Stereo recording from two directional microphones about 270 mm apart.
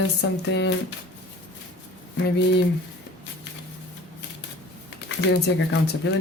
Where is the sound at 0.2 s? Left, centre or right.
Left.